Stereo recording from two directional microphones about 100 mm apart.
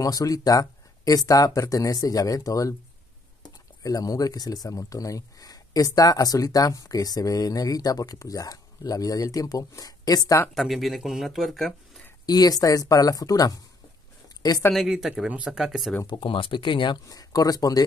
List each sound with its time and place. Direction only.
0.0 s speech: 35° left (ahead or behind)
3.8 s speech: 35° left (ahead or behind)
10.5 s speech: centre (ahead or behind)
12.3 s speech: 40° left (ahead or behind)
14.7 s speech: centre (ahead or behind)
16.1 s speech: 55° left (ahead or behind)
17.1 s speech: 40° left (ahead or behind)